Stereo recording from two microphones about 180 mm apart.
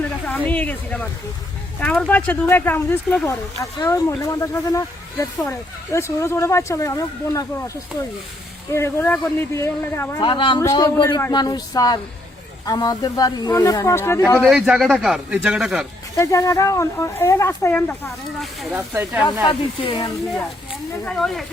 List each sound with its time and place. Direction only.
0.3 s speech: 10° left (ahead or behind)
8.7 s speech: 15° left (ahead or behind)
10.2 s speech: 25° left (ahead or behind)
10.6 s speech: 15° left (ahead or behind)
14.4 s a man's voice: 5° right (ahead or behind)
16.1 s speech: 20° left (ahead or behind); by 18.8 s centre (ahead or behind)
18.8 s speech: 15° right (ahead or behind)
19.5 s speech: 25° left (ahead or behind)
21.0 s a man's voice: centre (ahead or behind)